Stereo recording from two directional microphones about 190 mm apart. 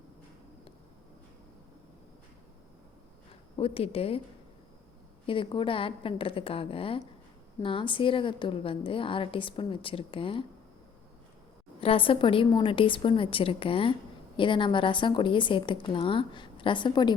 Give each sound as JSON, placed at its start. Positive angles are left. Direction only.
{"t": 3.6, "sound": "a woman's voice", "side_deg": 30}
{"t": 5.2, "sound": "a woman's voice", "side_deg": 25}
{"t": 11.8, "sound": "a woman's voice", "side_deg": 30}